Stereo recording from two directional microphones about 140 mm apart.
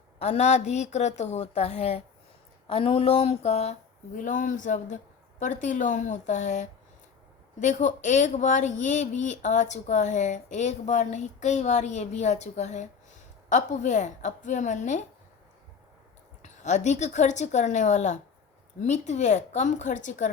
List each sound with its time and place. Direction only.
0.2 s speech: 50° left (ahead or behind)
16.4 s speech: 55° left (ahead or behind)